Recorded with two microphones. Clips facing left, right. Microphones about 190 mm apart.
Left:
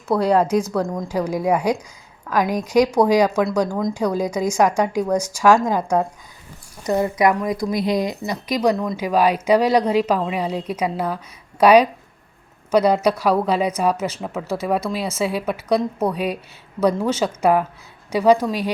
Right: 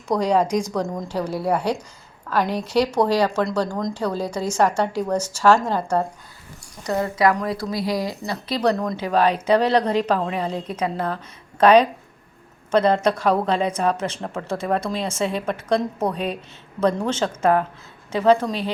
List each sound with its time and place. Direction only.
0.1 s a woman's voice: 5° left (ahead or behind)